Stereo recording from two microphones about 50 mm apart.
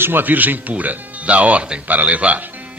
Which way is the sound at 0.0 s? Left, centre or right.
Right.